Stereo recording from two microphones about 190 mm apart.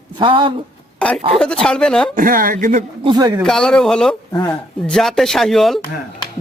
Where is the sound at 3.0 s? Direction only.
20° right (ahead or behind).